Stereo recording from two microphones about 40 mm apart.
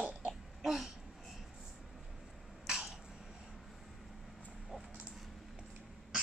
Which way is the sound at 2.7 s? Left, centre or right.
Centre.